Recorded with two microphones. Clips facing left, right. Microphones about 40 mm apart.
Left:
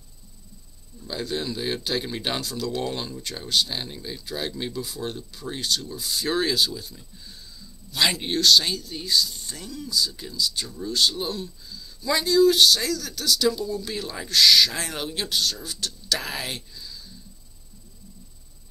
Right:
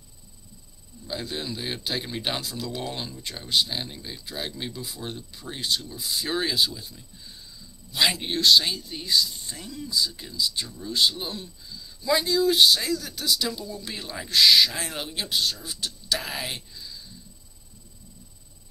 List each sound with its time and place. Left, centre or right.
1.0 s speech: centre
2.5 s speech: centre
2.8 s speech: centre
4.8 s speech: centre
7.2 s a sound: centre
8.4 s speech: centre
9.0 s speech: right
14.0 s speech: centre
14.3 s speech: centre
14.7 s speech: centre